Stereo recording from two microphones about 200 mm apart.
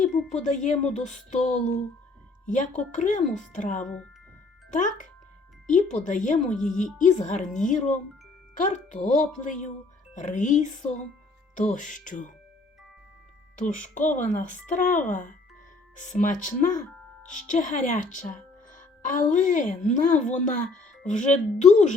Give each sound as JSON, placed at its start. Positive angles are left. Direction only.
{"t": 0.3, "sound": "a woman's voice", "side_deg": 35}
{"t": 13.6, "sound": "a woman's voice", "side_deg": 40}